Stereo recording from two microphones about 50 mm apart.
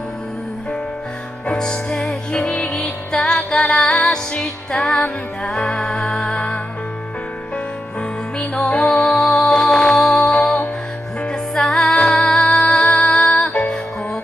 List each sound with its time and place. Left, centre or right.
1.5 s music: centre
2.7 s music: centre
8.8 s music: centre